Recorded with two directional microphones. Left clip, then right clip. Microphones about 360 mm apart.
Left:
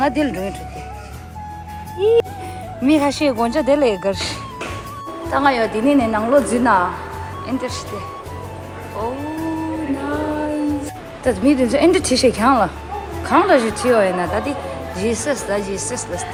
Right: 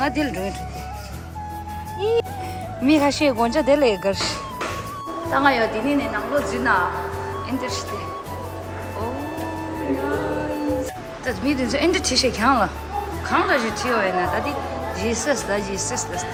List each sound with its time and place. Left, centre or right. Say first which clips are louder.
0.0 s speech: left 4 dB; centre
2.0 s speech: left 6 dB; centre
11.3 s speech: left 7 dB; centre